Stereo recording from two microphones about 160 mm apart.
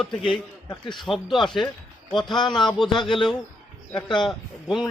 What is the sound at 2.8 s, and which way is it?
Speech, 30° left (ahead or behind).